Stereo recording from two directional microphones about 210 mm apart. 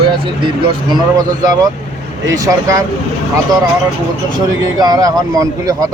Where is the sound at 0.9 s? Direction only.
20° right (ahead or behind).